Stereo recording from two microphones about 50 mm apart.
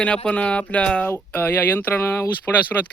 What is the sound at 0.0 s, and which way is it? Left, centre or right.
Speech, left.